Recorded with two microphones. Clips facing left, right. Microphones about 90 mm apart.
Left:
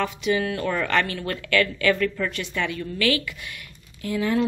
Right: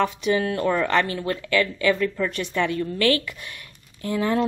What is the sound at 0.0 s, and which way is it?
A woman's voice, 35° right (ahead or behind).